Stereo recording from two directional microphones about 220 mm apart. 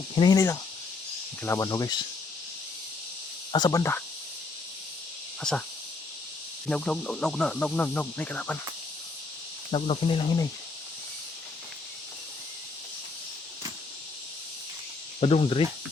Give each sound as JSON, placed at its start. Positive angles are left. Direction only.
{"t": 0.2, "sound": "speech", "side_deg": 15}
{"t": 3.5, "sound": "speech", "side_deg": 15}
{"t": 5.4, "sound": "speech", "side_deg": 5}
{"t": 6.7, "sound": "speech", "side_deg": 5}
{"t": 9.7, "sound": "speech", "side_deg": 25}
{"t": 15.2, "sound": "speech", "side_deg": 25}